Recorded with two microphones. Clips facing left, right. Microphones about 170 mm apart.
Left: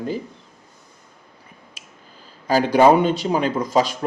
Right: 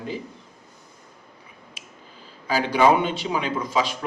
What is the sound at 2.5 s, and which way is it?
Speech, 40° left (ahead or behind).